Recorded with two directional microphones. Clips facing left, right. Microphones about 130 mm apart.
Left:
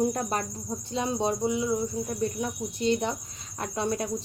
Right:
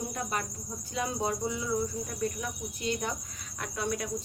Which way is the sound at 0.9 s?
25° left (ahead or behind).